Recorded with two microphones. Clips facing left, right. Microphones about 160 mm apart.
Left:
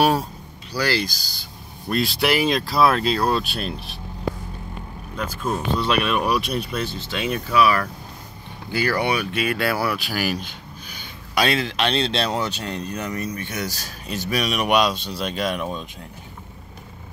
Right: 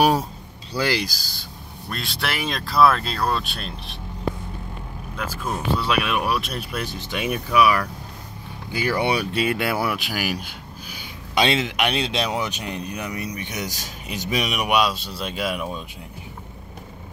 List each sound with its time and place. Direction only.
0.7 s speech: 20° right (ahead or behind)
1.9 s speech: centre (ahead or behind)
5.1 s speech: 5° right (ahead or behind)
9.0 s speech: 30° right (ahead or behind)
9.6 s speech: 20° right (ahead or behind)
11.3 s speech: 20° right (ahead or behind); by 15.8 s 5° right (ahead or behind)